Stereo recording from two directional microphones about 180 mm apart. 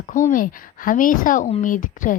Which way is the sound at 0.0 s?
45° left (ahead or behind).